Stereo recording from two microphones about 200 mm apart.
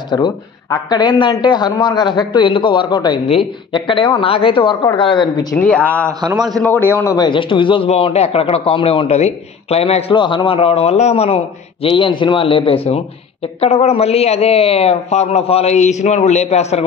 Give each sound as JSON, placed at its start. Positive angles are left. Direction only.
{"t": 0.1, "sound": "a man's voice", "side_deg": 20}
{"t": 5.6, "sound": "a man's voice", "side_deg": 5}